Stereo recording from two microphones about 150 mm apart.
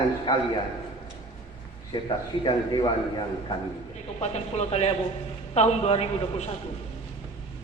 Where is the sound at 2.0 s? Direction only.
30° left (ahead or behind).